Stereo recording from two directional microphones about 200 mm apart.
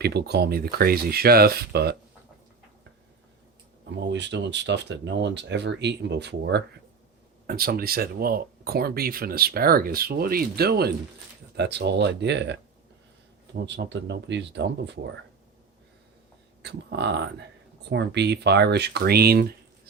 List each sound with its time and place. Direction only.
0.0 s speech: 55° right (ahead or behind)
4.0 s speech: 60° right (ahead or behind)
13.6 s speech: 60° right (ahead or behind)
16.6 s speech: 60° right (ahead or behind)